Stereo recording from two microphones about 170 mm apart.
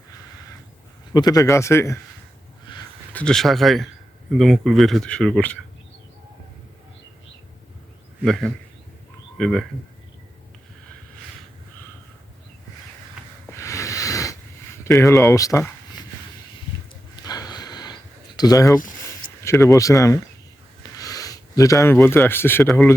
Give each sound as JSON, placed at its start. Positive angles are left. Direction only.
{"t": 1.1, "sound": "speech", "side_deg": 20}
{"t": 2.7, "sound": "a sound", "side_deg": 30}
{"t": 3.1, "sound": "speech", "side_deg": 5}
{"t": 8.2, "sound": "speech", "side_deg": 0}
{"t": 13.5, "sound": "snort", "side_deg": 15}
{"t": 14.8, "sound": "speech", "side_deg": 20}
{"t": 17.2, "sound": "a sound", "side_deg": 20}
{"t": 18.3, "sound": "speech", "side_deg": 20}